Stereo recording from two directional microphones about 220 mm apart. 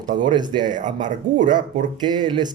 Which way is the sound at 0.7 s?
35° right (ahead or behind).